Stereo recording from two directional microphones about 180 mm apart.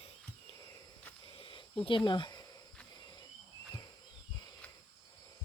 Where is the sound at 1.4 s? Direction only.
30° left (ahead or behind).